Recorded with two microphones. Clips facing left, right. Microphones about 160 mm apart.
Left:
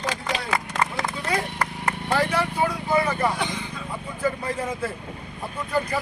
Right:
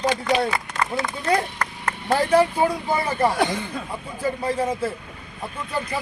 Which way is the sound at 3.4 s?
70° right (ahead or behind).